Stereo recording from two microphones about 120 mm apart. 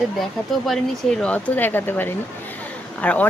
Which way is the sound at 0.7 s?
5° left (ahead or behind).